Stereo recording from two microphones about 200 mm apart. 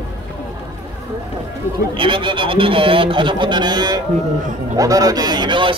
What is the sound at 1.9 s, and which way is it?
Speech, 25° right (ahead or behind).